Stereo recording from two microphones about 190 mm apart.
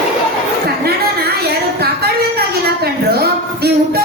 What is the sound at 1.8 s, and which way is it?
A woman's voice, 55° right (ahead or behind).